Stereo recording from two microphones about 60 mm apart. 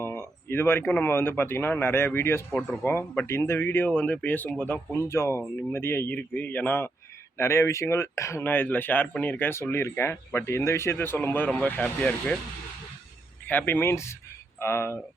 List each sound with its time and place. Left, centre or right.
0.0 s a sound: left
1.0 s speech: left
6.1 s speech: left
7.3 s speech: left
8.4 s speech: left
9.6 s speech: left
10.9 s speech: left
11.4 s speech: left
13.5 s speech: left
13.9 s speech: left